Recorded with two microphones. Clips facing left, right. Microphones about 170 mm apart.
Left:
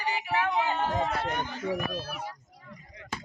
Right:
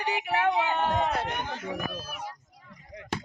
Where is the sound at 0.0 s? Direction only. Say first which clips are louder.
Right 2 dB; 65° right (ahead or behind).